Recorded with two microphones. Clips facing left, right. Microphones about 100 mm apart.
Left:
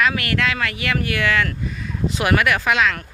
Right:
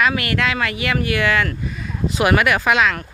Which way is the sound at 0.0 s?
15° right (ahead or behind).